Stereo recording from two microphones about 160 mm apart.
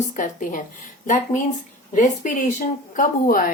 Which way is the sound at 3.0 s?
60° left (ahead or behind).